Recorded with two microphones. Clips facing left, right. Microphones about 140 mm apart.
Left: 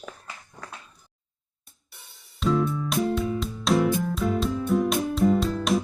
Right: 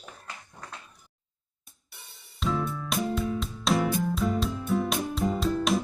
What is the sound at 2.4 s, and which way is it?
Music, centre (ahead or behind).